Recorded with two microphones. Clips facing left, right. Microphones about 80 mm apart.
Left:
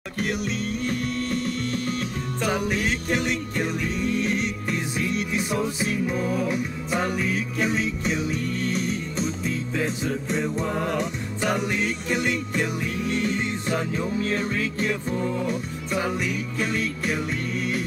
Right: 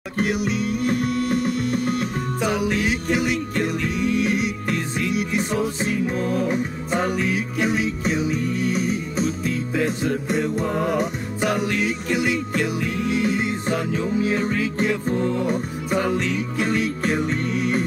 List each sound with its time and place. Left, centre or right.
0.3 s music: centre
0.7 s music: right
1.4 s music: centre
6.1 s music: centre
15.1 s music: centre
15.4 s music: right